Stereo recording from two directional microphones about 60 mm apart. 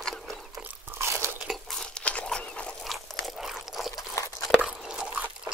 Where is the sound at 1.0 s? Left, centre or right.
Right.